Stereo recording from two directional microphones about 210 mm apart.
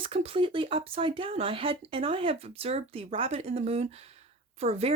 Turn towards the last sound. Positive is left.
turn(degrees=-30)  # may be behind; listen again after turning